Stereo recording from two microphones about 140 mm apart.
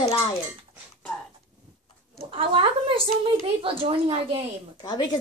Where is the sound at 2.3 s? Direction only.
40° right (ahead or behind).